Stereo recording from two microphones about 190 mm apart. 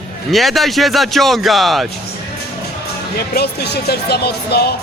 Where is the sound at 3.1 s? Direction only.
55° left (ahead or behind).